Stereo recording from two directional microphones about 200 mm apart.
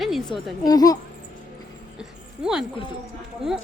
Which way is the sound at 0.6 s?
20° left (ahead or behind).